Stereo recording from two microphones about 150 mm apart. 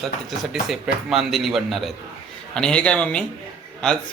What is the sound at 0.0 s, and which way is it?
A man's voice, centre (ahead or behind).